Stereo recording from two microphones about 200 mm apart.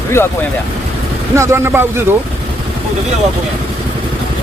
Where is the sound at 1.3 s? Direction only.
15° right (ahead or behind).